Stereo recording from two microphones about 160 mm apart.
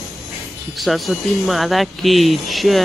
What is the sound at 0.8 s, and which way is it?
Speech, centre (ahead or behind).